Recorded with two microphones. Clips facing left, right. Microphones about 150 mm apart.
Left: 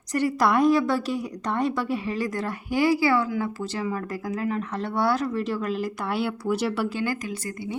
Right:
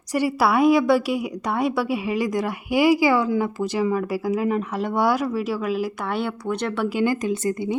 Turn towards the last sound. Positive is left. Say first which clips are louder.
# right 9 dB
turn(degrees=-20)  # may be behind; listen again after turning